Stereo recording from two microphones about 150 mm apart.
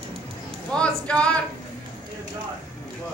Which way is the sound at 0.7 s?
5° left (ahead or behind).